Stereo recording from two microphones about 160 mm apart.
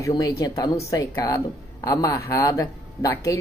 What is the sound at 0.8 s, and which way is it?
A man's voice, 20° left (ahead or behind).